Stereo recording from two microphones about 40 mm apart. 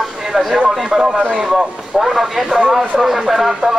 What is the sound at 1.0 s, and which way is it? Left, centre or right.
Speech, right.